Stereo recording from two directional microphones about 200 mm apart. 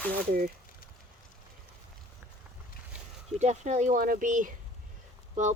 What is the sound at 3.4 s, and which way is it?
Speech, 35° right (ahead or behind).